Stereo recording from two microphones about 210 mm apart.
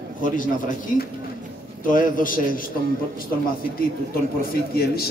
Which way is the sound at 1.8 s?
40° left (ahead or behind).